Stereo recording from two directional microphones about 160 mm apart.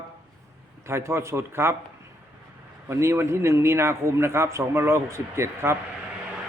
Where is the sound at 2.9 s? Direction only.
15° right (ahead or behind).